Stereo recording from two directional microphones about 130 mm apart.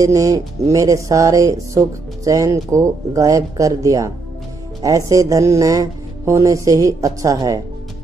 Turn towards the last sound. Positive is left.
turn(degrees=-25)  # may be behind; listen again after turning